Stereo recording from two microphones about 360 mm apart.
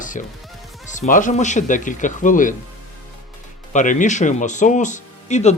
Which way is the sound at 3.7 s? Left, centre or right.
Left.